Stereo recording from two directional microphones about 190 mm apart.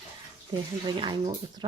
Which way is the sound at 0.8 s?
20° right (ahead or behind).